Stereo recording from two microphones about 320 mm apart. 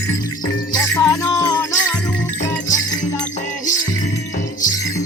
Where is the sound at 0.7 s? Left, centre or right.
Centre.